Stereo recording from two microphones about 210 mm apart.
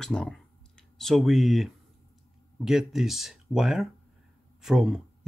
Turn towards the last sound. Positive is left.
turn(degrees=0)  # may be behind; listen again after turning